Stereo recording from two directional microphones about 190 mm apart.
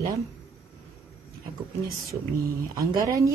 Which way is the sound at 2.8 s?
15° right (ahead or behind).